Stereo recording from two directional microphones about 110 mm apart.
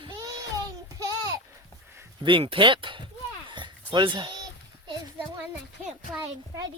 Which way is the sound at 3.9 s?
45° right (ahead or behind).